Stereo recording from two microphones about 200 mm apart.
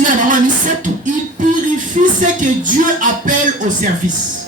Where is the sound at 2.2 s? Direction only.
40° right (ahead or behind).